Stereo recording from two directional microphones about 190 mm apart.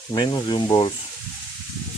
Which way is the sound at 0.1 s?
25° left (ahead or behind).